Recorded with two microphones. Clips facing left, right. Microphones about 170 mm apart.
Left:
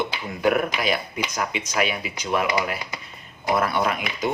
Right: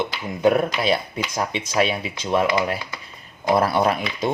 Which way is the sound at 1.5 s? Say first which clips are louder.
Right 5 dB; 30° right (ahead or behind).